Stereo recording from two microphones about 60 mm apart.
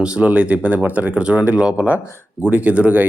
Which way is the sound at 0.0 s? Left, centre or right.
Centre.